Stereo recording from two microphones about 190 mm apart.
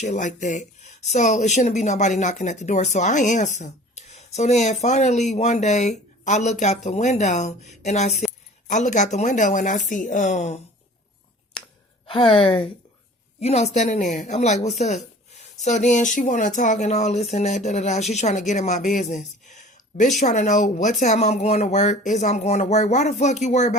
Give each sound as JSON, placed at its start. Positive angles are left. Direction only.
{"t": 0.0, "sound": "speech", "side_deg": 40}
{"t": 12.0, "sound": "a woman's voice", "side_deg": 30}